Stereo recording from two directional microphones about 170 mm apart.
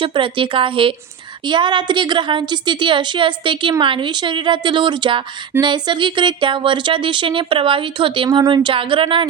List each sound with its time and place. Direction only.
0.0 s a woman's voice: 30° right (ahead or behind)